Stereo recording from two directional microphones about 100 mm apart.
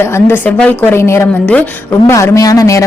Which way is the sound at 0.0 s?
25° left (ahead or behind).